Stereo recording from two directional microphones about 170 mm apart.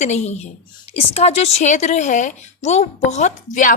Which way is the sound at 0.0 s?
40° left (ahead or behind).